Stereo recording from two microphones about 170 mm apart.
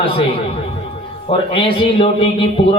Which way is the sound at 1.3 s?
30° left (ahead or behind).